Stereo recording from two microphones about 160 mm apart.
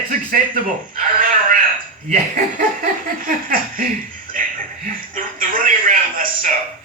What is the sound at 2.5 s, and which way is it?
Laughter, 60° right (ahead or behind).